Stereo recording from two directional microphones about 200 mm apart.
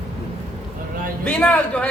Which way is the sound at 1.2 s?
5° left (ahead or behind).